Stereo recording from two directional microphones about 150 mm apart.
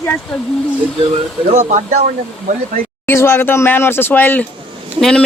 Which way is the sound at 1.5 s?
55° right (ahead or behind).